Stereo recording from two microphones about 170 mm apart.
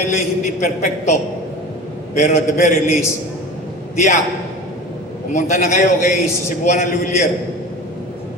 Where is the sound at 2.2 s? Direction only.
45° left (ahead or behind).